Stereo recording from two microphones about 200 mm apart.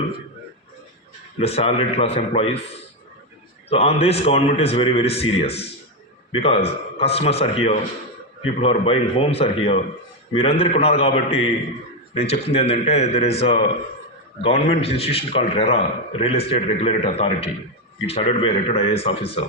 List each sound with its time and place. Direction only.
1.4 s a man's voice: 30° left (ahead or behind)
3.7 s a man's voice: 30° left (ahead or behind)